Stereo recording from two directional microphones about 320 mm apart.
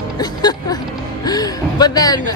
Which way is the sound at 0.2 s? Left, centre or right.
Centre.